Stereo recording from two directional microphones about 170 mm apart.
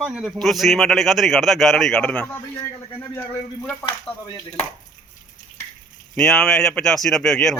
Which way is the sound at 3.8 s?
30° left (ahead or behind).